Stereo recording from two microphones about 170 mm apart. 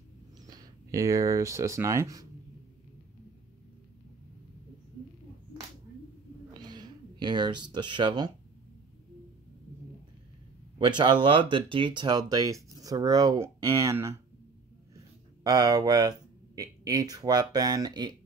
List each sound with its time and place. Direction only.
0.6 s speech: 20° right (ahead or behind)
6.6 s speech: 25° right (ahead or behind)
10.8 s speech: 25° right (ahead or behind)
15.4 s speech: 20° right (ahead or behind)